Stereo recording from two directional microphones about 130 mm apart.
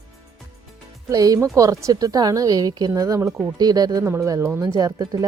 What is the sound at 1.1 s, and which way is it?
Speech, 25° right (ahead or behind).